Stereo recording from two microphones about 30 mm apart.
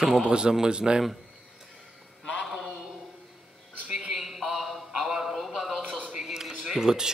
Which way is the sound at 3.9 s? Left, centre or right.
Centre.